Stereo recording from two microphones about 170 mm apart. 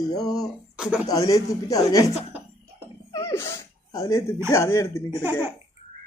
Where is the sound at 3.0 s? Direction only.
15° left (ahead or behind).